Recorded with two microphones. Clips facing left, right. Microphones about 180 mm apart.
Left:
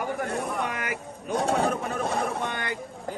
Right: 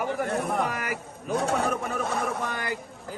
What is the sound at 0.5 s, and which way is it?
Speech, 35° right (ahead or behind).